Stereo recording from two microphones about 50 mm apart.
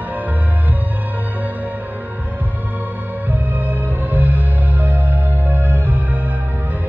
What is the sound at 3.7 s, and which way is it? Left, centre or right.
Music, right.